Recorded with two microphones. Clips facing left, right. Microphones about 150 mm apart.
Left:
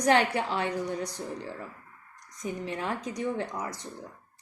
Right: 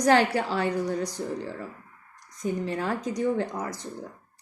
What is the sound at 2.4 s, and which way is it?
Speech, 35° right (ahead or behind).